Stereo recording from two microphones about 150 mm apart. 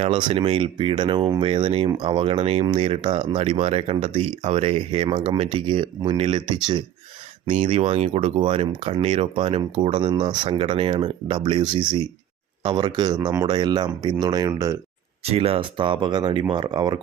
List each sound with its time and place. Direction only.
0.0 s speech: 30° right (ahead or behind)
7.4 s speech: 55° right (ahead or behind); by 14.8 s 20° right (ahead or behind)
15.2 s speech: 40° right (ahead or behind)